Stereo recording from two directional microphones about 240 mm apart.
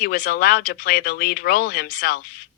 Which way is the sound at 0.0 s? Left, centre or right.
Left.